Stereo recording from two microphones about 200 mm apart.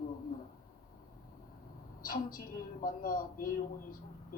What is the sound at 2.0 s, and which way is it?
A woman's voice, 45° left (ahead or behind).